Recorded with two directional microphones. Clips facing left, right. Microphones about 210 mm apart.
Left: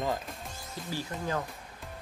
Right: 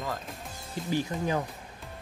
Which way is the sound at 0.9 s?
15° right (ahead or behind).